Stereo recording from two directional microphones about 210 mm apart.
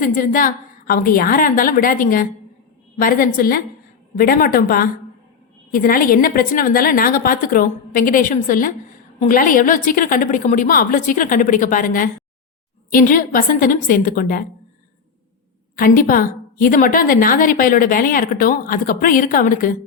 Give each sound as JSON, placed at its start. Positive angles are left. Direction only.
{"t": 0.0, "sound": "a woman's voice", "side_deg": 40}
{"t": 15.7, "sound": "a woman's voice", "side_deg": 40}